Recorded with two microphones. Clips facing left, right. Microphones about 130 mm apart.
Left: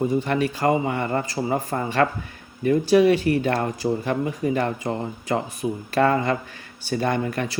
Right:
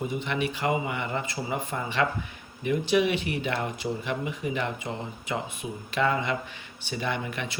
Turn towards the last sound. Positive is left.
turn(degrees=40)  # may be behind; listen again after turning